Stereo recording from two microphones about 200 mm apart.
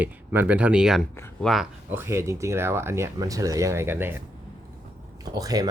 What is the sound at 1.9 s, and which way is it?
Speech, 10° right (ahead or behind).